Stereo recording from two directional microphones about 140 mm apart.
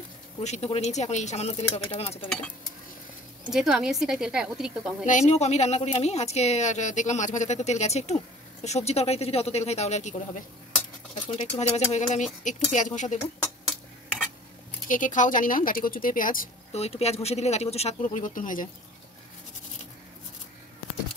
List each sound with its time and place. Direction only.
0.4 s a woman's voice: 55° left (ahead or behind)
3.4 s a woman's voice: 5° right (ahead or behind)
5.0 s a woman's voice: 60° left (ahead or behind)
14.9 s speech: 65° left (ahead or behind)
16.7 s a woman's voice: 45° left (ahead or behind); by 18.7 s 70° left (ahead or behind)